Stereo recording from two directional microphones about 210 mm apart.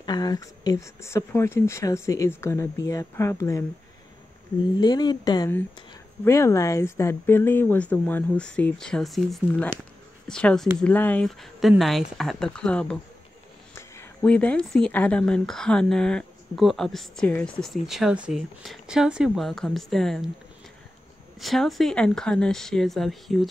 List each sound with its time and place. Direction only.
0.0 s speech: 20° left (ahead or behind)
4.7 s speech: 20° left (ahead or behind); by 20.2 s centre (ahead or behind)
21.4 s speech: centre (ahead or behind)